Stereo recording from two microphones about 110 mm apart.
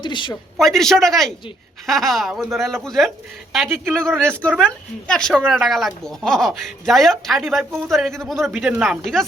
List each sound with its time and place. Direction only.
0.0 s speech: 45° left (ahead or behind)
0.5 s a woman's voice: 5° left (ahead or behind)